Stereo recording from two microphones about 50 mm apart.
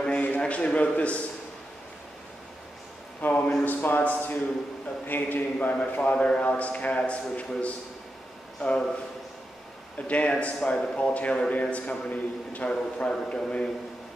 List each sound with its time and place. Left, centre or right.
0.0 s a sound: left
0.4 s a man's voice: left
3.2 s a man's voice: left
9.9 s a man's voice: left
12.6 s a man's voice: left